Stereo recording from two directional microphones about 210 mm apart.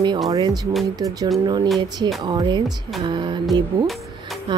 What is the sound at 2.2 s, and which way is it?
Speech, 20° right (ahead or behind).